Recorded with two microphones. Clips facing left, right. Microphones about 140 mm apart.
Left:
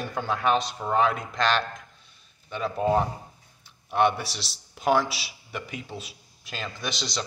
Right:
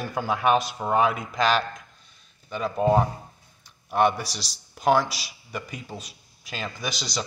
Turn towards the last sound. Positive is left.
turn(degrees=-5)  # may be behind; listen again after turning